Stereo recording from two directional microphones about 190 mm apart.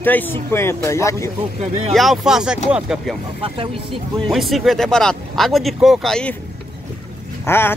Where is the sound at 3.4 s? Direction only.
30° right (ahead or behind).